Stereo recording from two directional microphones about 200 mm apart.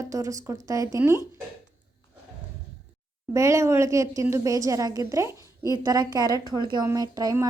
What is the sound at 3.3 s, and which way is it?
A woman's voice, 15° right (ahead or behind).